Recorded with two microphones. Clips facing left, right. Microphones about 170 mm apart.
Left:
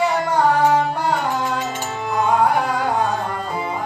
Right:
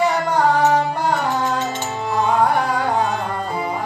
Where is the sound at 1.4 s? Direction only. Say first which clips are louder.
Right 2 dB; 10° left (ahead or behind).